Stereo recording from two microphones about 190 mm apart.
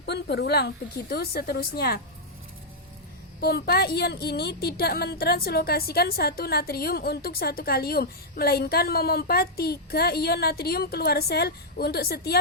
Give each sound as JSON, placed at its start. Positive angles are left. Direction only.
{"t": 0.0, "sound": "a woman's voice", "side_deg": 60}
{"t": 3.4, "sound": "a woman's voice", "side_deg": 55}